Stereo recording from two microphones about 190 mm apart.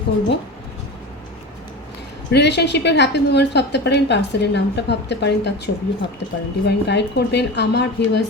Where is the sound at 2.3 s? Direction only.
65° left (ahead or behind).